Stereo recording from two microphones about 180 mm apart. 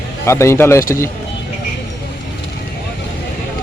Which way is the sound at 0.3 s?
15° left (ahead or behind).